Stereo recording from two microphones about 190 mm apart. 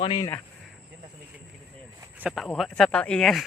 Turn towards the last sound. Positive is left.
turn(degrees=0)  # may be behind; listen again after turning